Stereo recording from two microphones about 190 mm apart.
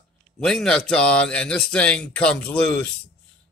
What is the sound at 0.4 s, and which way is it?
Speech, 5° left (ahead or behind).